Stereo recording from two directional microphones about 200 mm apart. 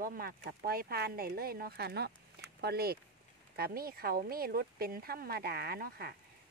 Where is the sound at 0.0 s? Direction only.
45° right (ahead or behind).